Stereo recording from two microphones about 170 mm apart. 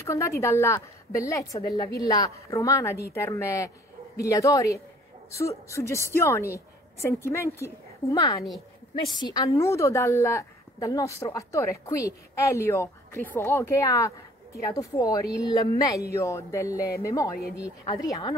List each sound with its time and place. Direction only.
0.0 s a woman's voice: 15° left (ahead or behind)
4.2 s music: 20° left (ahead or behind)
5.7 s a woman's voice: 15° left (ahead or behind)
15.4 s music: 20° left (ahead or behind)